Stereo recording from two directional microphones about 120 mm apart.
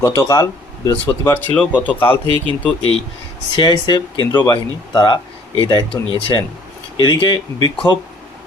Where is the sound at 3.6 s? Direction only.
40° left (ahead or behind).